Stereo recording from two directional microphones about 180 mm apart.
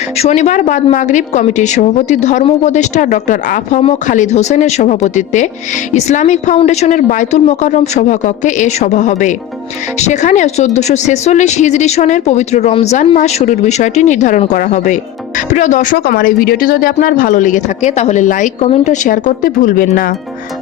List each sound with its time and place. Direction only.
0.2 s a woman's voice: 40° left (ahead or behind)